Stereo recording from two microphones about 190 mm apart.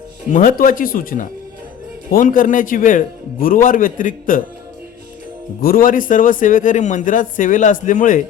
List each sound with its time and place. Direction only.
0.3 s a man's voice: 45° left (ahead or behind)
5.6 s a man's voice: 50° left (ahead or behind)